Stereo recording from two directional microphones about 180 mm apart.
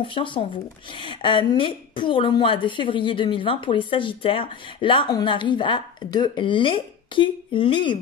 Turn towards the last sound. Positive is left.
turn(degrees=30)  # may be behind; listen again after turning